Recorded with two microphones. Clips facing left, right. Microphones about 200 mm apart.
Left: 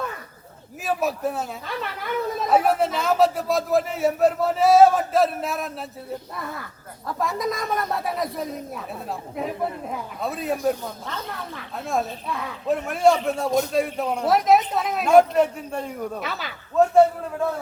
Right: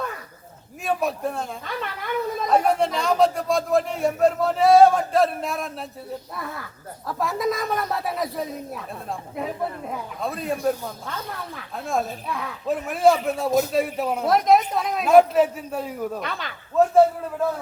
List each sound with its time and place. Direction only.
0.9 s speech: 5° left (ahead or behind)
7.1 s speech: centre (ahead or behind)
10.2 s speech: centre (ahead or behind)